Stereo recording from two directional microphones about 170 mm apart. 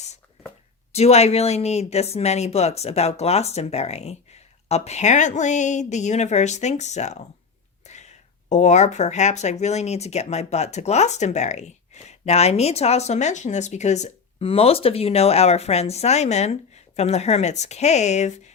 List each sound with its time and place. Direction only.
0.9 s speech: 40° left (ahead or behind)